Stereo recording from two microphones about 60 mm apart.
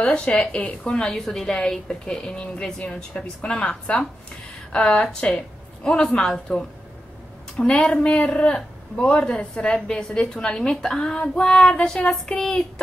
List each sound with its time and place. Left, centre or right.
0.0 s a woman's voice: centre